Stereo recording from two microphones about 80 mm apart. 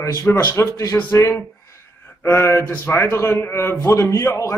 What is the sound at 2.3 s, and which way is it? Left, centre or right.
A man's voice, left.